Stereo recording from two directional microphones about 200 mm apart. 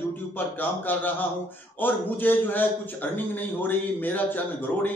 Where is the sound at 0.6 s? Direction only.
10° left (ahead or behind).